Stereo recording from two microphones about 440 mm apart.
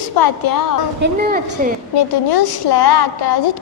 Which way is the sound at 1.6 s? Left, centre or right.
Centre.